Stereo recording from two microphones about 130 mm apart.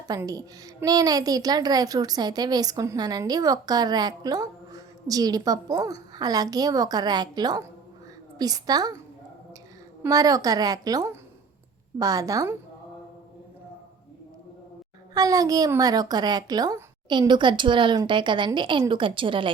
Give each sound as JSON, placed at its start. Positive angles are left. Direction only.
{"t": 0.3, "sound": "a woman's voice", "side_deg": -30}
{"t": 10.0, "sound": "a woman's voice", "side_deg": -25}
{"t": 15.1, "sound": "a woman's voice", "side_deg": -30}